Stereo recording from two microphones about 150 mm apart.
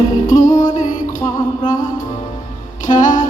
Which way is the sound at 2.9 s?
60° left (ahead or behind).